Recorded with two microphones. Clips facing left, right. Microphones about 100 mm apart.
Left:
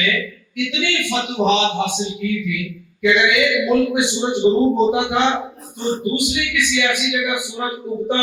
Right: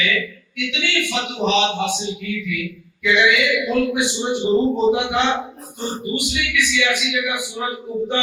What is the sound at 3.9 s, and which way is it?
A man's voice, 20° left (ahead or behind).